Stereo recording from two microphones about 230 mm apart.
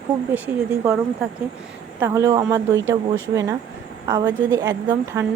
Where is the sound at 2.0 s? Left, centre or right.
Centre.